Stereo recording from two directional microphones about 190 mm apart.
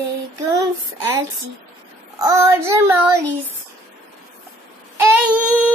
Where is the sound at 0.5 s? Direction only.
20° right (ahead or behind).